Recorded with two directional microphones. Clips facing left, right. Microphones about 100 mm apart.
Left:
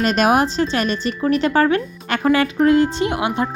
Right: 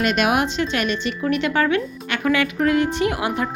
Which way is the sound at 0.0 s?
35° left (ahead or behind).